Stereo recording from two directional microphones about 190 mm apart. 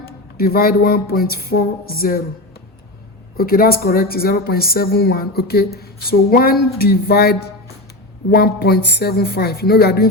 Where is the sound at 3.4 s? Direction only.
50° left (ahead or behind).